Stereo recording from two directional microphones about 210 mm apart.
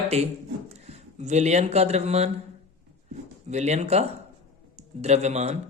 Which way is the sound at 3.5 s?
35° right (ahead or behind).